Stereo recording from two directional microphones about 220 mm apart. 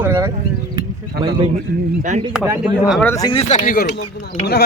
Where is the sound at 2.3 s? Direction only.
5° right (ahead or behind).